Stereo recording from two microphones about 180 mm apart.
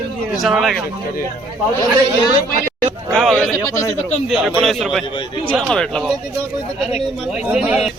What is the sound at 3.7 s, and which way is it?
Speech, 15° left (ahead or behind).